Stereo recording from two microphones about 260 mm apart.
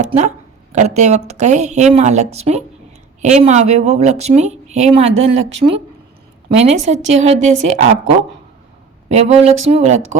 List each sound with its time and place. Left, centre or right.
0.0 s a woman's voice: right
9.0 s a woman's voice: right